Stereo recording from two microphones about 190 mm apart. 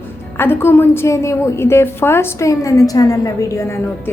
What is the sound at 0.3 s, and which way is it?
A woman's voice, 10° left (ahead or behind).